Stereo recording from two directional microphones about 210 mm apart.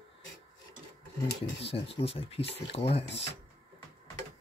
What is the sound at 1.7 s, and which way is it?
Speech, 25° left (ahead or behind).